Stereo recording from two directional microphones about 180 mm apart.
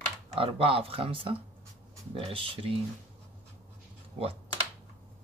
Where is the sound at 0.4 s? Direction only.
30° right (ahead or behind).